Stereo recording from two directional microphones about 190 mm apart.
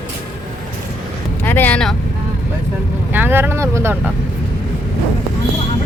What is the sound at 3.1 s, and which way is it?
Vehicle, 10° right (ahead or behind).